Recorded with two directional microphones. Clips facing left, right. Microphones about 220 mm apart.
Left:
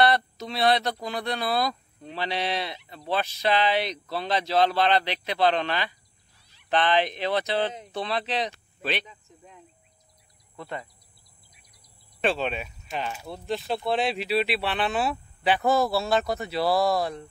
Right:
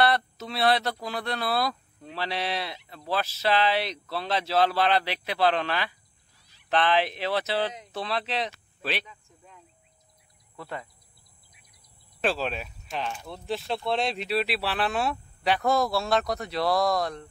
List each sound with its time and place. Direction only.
0.0 s speech: 5° right (ahead or behind)
9.0 s snake: 20° left (ahead or behind)
12.2 s speech: centre (ahead or behind)